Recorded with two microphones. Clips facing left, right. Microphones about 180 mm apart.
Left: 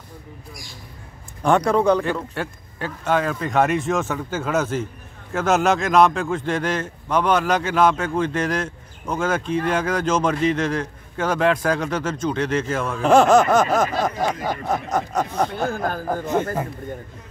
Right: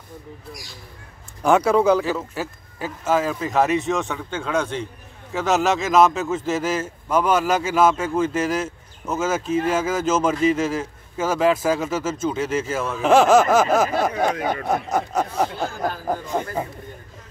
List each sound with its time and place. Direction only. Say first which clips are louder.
1.4 s a man's voice: right 1 dB; 5° right (ahead or behind)
14.1 s speech: right 2 dB; 60° right (ahead or behind)
14.7 s speech: left 1 dB; 10° right (ahead or behind)
16.2 s a man's voice: left 4 dB; 45° left (ahead or behind)